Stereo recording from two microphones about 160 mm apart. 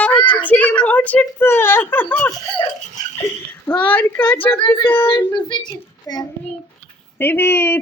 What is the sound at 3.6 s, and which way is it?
A woman's voice, 10° left (ahead or behind).